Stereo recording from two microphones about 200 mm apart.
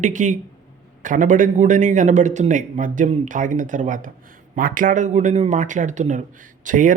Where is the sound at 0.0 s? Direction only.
40° right (ahead or behind).